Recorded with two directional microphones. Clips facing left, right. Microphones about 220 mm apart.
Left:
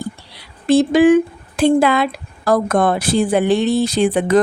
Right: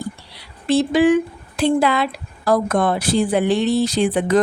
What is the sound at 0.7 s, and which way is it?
Speech, 50° left (ahead or behind).